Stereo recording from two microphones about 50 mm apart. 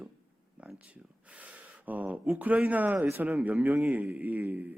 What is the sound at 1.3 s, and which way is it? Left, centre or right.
A man's voice, right.